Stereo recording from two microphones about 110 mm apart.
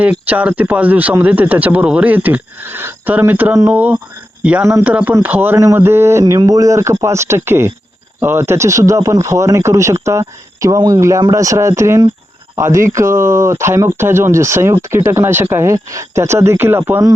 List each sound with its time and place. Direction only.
0.0 s speech: 15° right (ahead or behind)